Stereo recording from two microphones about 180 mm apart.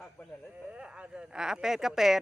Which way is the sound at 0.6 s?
5° right (ahead or behind).